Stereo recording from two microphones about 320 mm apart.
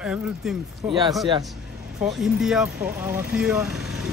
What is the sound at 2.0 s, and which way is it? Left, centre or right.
Speech, centre.